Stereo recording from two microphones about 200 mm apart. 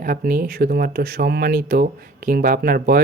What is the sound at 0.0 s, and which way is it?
Speech, 45° right (ahead or behind).